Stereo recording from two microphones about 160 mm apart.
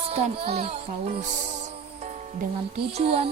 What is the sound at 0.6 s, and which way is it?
Music, 35° right (ahead or behind).